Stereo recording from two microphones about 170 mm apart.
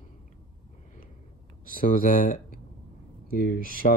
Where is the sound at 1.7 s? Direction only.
55° left (ahead or behind).